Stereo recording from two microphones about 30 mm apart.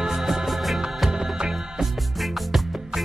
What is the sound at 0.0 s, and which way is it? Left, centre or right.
Music, centre.